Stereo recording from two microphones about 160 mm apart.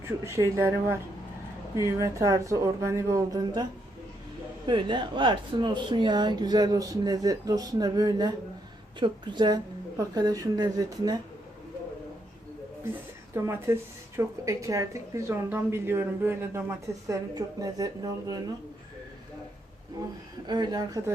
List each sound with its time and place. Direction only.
0.0 s a woman's voice: 15° right (ahead or behind)
12.8 s a woman's voice: 15° right (ahead or behind)
20.5 s speech: 25° right (ahead or behind)